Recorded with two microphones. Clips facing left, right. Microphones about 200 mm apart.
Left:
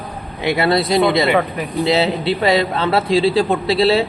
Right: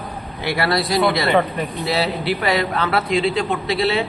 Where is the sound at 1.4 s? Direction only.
5° left (ahead or behind).